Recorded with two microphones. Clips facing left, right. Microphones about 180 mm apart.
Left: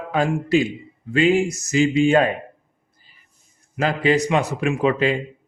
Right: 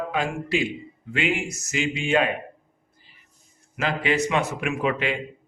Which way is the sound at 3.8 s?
35° left (ahead or behind).